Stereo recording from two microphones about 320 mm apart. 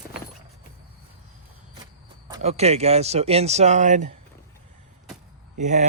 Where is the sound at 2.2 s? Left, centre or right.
Centre.